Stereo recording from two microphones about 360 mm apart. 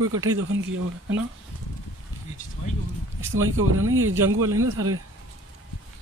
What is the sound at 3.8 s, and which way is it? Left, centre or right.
Speech, right.